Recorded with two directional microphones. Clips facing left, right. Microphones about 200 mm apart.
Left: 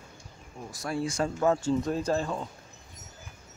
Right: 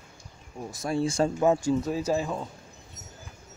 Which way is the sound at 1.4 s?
15° right (ahead or behind).